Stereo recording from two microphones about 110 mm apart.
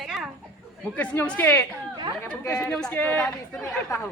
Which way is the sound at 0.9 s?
15° left (ahead or behind).